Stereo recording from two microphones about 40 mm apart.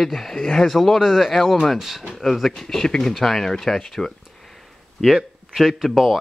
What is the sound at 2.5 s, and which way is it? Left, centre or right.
Speech, centre.